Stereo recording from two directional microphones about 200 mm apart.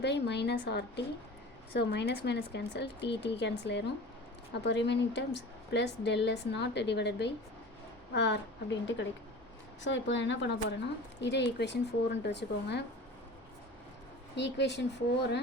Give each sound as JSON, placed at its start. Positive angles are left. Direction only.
{"t": 0.0, "sound": "a woman's voice", "side_deg": 60}
{"t": 14.3, "sound": "a woman's voice", "side_deg": 60}